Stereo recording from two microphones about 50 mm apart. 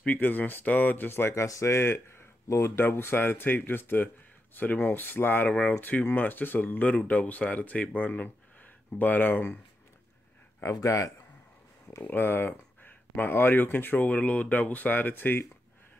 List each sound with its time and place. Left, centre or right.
0.0 s speech: left
1.3 s speech: left
2.4 s speech: left
2.7 s speech: left
4.6 s speech: left
5.5 s speech: left
10.6 s speech: left
12.0 s speech: left